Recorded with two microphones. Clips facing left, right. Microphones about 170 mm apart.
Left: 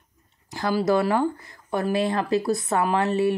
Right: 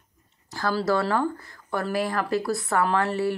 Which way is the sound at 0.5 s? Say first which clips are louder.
Left 2 dB; 20° left (ahead or behind).